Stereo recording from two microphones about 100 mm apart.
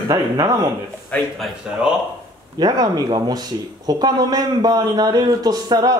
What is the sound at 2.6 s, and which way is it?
A man's voice, 45° right (ahead or behind).